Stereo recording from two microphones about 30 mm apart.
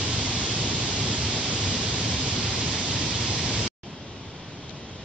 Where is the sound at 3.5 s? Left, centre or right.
Right.